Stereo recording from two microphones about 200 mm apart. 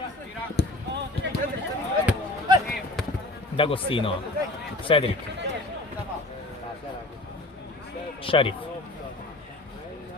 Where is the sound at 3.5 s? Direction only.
25° left (ahead or behind).